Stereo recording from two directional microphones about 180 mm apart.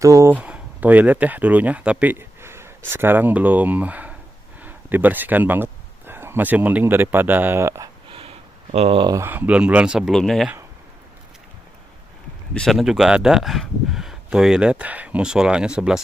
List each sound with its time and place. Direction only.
0.0 s speech: 15° right (ahead or behind)
8.1 s a sound: 30° right (ahead or behind)
9.1 s speech: 10° right (ahead or behind)
12.5 s speech: centre (ahead or behind)